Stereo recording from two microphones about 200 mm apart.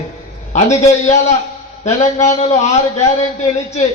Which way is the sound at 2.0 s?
35° left (ahead or behind).